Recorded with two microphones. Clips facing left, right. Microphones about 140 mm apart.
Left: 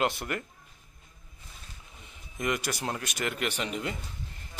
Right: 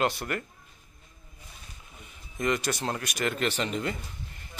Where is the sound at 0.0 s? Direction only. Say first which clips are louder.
Right 1 dB; 15° left (ahead or behind).